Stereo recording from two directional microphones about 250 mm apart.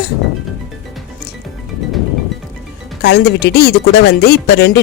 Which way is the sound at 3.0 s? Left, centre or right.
Left.